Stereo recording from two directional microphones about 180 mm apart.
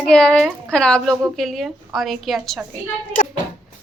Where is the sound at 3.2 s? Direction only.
45° left (ahead or behind).